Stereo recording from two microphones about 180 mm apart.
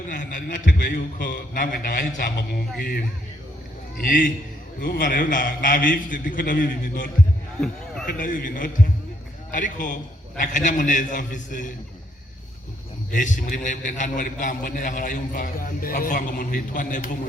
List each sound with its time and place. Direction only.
0.1 s a man's voice: 50° left (ahead or behind)
13.1 s a man's voice: 45° left (ahead or behind)